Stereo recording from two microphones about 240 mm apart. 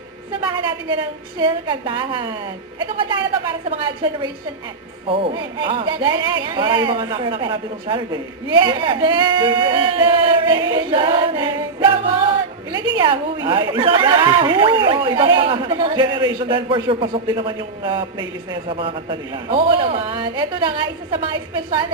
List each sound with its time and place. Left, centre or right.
0.5 s a sound: centre
1.4 s speech: centre
5.0 s speech: right
13.0 s speech: centre